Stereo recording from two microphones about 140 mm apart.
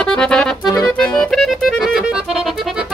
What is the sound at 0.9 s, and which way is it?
Accordion, centre (ahead or behind).